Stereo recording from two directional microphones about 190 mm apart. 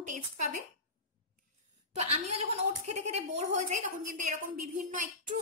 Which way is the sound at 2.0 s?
35° right (ahead or behind).